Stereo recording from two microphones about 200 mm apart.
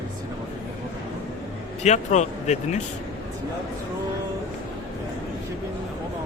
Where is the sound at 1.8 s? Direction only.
35° left (ahead or behind).